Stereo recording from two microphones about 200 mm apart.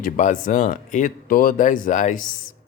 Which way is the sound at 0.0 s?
40° left (ahead or behind).